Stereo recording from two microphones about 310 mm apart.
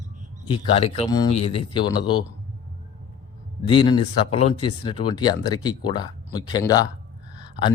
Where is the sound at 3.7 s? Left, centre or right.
Centre.